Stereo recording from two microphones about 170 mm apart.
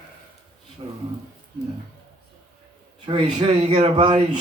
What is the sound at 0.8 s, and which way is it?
Speech, 35° right (ahead or behind).